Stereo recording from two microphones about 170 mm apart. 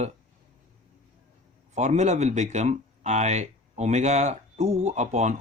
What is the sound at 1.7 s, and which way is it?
Speech, 40° right (ahead or behind).